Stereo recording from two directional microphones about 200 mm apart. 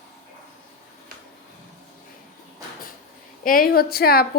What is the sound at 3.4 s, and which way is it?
Speech, 45° left (ahead or behind).